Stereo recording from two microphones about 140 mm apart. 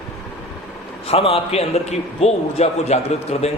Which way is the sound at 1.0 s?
45° left (ahead or behind).